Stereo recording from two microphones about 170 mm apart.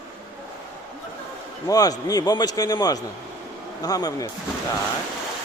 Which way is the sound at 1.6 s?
20° left (ahead or behind).